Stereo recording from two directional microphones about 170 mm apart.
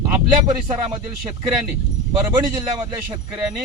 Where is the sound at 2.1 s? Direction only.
25° right (ahead or behind).